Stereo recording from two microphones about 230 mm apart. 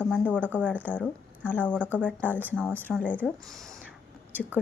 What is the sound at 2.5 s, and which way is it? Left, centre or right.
Speech, centre.